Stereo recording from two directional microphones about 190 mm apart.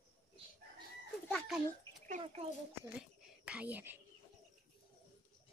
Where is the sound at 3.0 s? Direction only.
5° right (ahead or behind).